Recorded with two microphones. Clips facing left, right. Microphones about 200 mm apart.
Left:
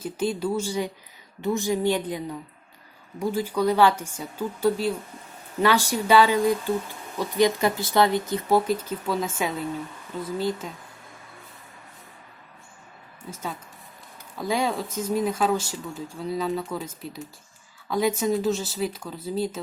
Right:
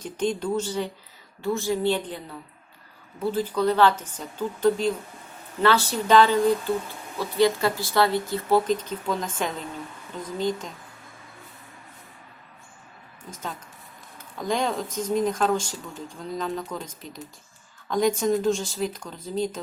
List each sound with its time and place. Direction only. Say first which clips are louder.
0.0 s speech: even; 5° left (ahead or behind)
13.3 s speech: left 1 dB; 5° left (ahead or behind)